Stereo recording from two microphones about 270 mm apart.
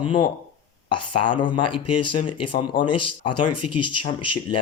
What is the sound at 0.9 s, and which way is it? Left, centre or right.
Speech, centre.